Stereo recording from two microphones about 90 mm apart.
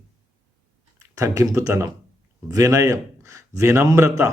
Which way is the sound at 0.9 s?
40° right (ahead or behind).